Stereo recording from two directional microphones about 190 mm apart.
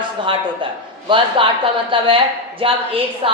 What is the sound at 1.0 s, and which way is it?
A man's voice, 25° right (ahead or behind).